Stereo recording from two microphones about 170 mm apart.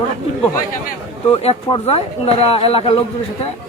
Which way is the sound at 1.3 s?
35° left (ahead or behind).